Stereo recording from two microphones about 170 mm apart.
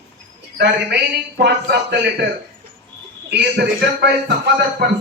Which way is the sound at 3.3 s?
85° right.